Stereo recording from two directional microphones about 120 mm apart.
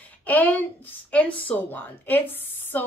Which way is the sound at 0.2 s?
15° left (ahead or behind).